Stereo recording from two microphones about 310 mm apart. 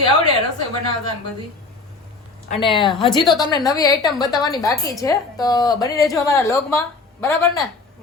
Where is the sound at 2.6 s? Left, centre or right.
Centre.